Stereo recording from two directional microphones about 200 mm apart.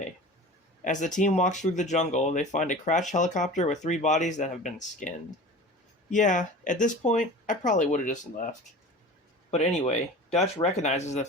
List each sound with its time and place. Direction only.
0.9 s speech: 40° left (ahead or behind)
9.5 s speech: 35° left (ahead or behind)